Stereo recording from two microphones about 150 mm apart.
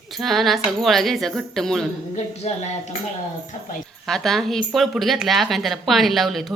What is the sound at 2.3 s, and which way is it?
Speech, 45° left (ahead or behind).